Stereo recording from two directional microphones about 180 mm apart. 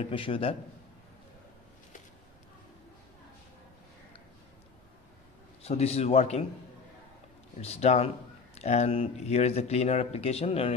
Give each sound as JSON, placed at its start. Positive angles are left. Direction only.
{"t": 0.0, "sound": "speech", "side_deg": 30}
{"t": 5.6, "sound": "speech", "side_deg": 35}
{"t": 7.6, "sound": "speech", "side_deg": 35}